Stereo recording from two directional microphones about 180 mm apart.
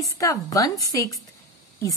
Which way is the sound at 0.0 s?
20° left (ahead or behind).